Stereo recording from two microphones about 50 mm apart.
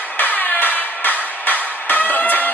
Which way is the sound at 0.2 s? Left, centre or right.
Left.